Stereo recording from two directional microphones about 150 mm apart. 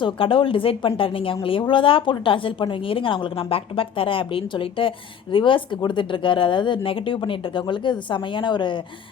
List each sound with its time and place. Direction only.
0.0 s a woman's voice: 35° left (ahead or behind)